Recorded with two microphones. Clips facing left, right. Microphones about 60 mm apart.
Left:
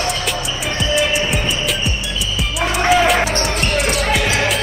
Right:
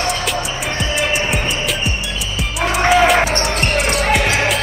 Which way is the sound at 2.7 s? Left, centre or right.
Centre.